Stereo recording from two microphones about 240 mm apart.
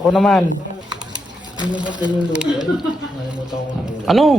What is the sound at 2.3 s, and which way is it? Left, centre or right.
Speech, centre.